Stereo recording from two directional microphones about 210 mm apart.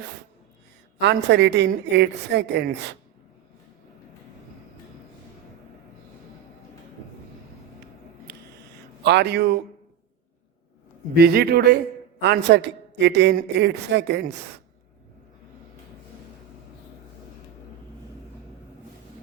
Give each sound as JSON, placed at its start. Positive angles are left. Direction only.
{"t": 0.9, "sound": "a man's voice", "side_deg": -55}
{"t": 8.3, "sound": "a sound", "side_deg": -50}
{"t": 9.0, "sound": "a man's voice", "side_deg": -55}
{"t": 11.1, "sound": "a man's voice", "side_deg": -50}